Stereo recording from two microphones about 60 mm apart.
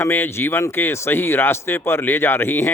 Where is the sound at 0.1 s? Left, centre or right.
Left.